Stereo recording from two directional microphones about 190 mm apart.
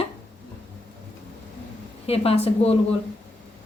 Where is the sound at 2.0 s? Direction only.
30° left (ahead or behind).